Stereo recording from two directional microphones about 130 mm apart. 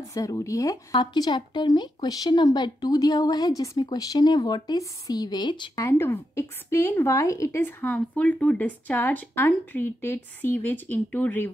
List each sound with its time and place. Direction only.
0.1 s speech: 25° left (ahead or behind)
5.8 s speech: 20° left (ahead or behind)